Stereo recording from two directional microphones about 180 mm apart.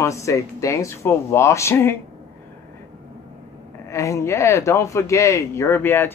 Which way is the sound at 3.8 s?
15° left (ahead or behind).